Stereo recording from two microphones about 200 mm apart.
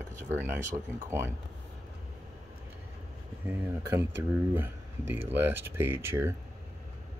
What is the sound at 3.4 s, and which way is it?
Speech, 10° right (ahead or behind).